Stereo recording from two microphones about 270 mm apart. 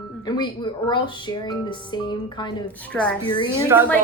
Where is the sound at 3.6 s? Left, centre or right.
Centre.